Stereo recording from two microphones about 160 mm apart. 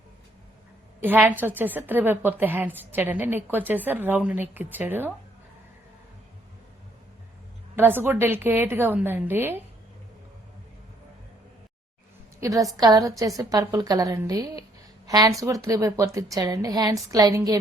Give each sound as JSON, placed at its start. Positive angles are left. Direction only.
{"t": 1.0, "sound": "a woman's voice", "side_deg": -10}
{"t": 7.8, "sound": "a woman's voice", "side_deg": -15}
{"t": 12.4, "sound": "a woman's voice", "side_deg": -20}